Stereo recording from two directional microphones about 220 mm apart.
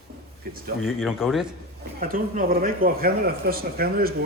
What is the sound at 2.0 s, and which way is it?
Speech, 40° right (ahead or behind).